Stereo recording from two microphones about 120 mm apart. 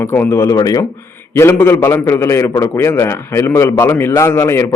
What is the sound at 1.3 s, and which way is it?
A man's voice, 20° left (ahead or behind).